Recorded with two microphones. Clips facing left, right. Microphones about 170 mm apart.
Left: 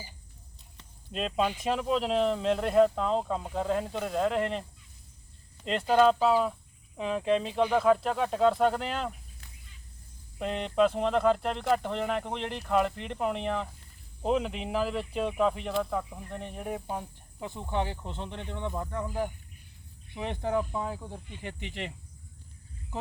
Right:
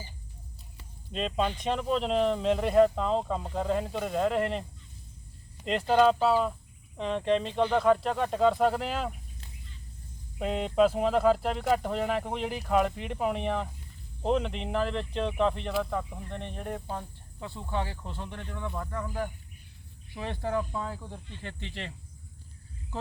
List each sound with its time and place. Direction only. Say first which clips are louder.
1.1 s speech: even; 5° left (ahead or behind)
5.6 s speech: even; centre (ahead or behind)
10.3 s speech: right 1 dB; 5° right (ahead or behind); by 21.9 s 15° left (ahead or behind)